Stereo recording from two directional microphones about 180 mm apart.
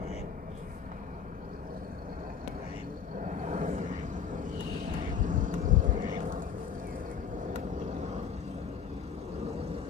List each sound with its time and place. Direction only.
3.4 s vehicle: 40° right (ahead or behind)
5.1 s vehicle: 45° right (ahead or behind)